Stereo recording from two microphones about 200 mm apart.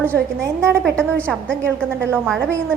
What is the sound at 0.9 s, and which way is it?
A woman's voice, 5° left (ahead or behind).